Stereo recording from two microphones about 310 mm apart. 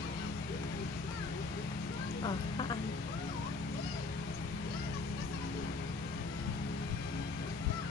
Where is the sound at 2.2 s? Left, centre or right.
Centre.